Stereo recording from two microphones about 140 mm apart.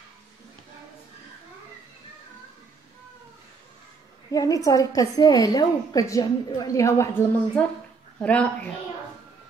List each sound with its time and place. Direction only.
4.3 s a woman's voice: 25° left (ahead or behind)
8.2 s speech: 10° left (ahead or behind)